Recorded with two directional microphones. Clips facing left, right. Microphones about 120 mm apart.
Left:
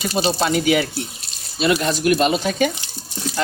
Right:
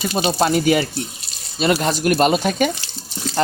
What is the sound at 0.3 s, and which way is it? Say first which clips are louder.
Speech: right 4 dB; 45° right (ahead or behind).